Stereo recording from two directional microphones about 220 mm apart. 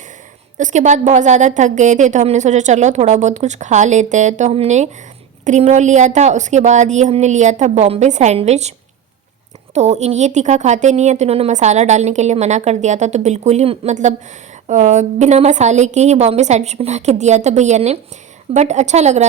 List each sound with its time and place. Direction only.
0.5 s a woman's voice: 35° right (ahead or behind)
9.7 s a woman's voice: 30° right (ahead or behind)